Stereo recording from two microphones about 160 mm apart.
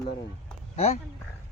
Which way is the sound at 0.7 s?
40° left (ahead or behind).